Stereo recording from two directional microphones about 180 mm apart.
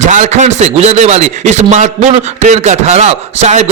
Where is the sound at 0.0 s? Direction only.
40° right (ahead or behind).